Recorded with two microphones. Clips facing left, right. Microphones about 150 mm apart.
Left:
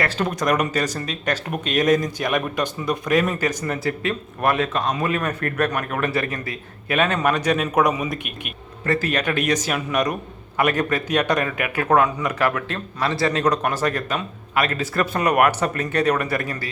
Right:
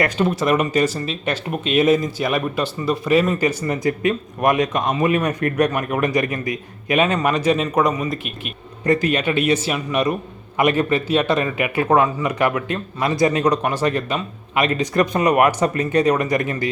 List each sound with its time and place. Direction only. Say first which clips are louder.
0.2 s a man's voice: right 1 dB; 5° right (ahead or behind)
7.6 s speech: right 1 dB; 5° left (ahead or behind)
8.8 s a man's voice: right 4 dB; 15° right (ahead or behind)